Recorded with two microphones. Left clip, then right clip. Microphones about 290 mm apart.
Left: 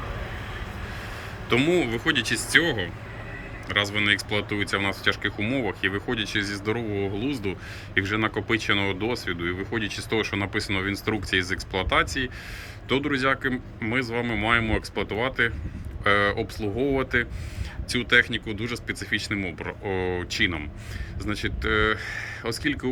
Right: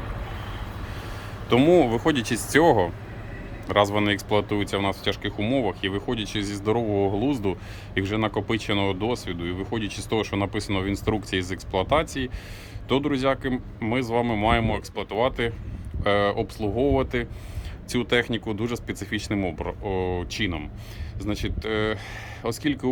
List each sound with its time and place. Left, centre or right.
1.5 s speech: centre